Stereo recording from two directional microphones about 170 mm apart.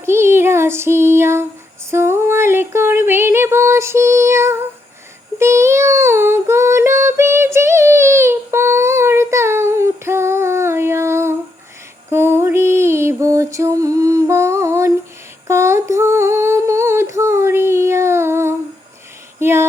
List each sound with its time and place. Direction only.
0.0 s child singing: 15° right (ahead or behind)
1.9 s a sound: 15° right (ahead or behind)
5.4 s child singing: 15° right (ahead or behind)
12.1 s music: 15° right (ahead or behind)
15.4 s humming: 15° right (ahead or behind)
19.4 s female singing: 15° right (ahead or behind)